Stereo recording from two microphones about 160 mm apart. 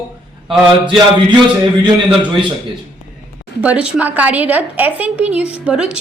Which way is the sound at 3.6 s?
10° right (ahead or behind).